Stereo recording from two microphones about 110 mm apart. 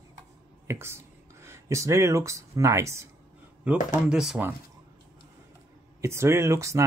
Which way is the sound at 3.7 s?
15° right (ahead or behind).